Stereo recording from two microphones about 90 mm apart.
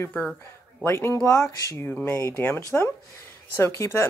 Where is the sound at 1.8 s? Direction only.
20° left (ahead or behind).